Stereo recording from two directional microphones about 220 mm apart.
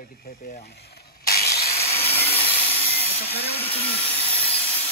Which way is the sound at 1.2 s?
45° left (ahead or behind).